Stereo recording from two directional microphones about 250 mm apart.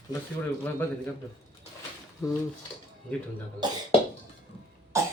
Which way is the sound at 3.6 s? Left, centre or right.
Centre.